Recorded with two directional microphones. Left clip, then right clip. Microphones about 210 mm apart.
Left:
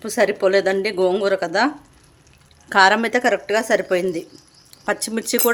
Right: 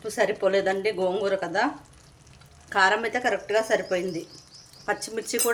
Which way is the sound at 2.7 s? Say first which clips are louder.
Left 7 dB; 55° left (ahead or behind).